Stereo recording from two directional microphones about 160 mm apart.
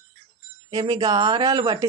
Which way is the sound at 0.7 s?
25° right (ahead or behind).